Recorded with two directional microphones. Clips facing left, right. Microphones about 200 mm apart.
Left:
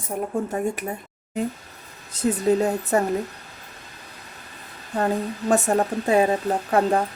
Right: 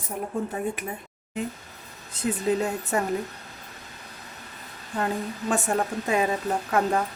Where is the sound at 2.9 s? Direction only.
40° left (ahead or behind).